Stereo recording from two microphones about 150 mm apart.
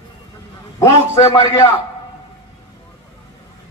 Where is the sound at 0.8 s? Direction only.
20° left (ahead or behind).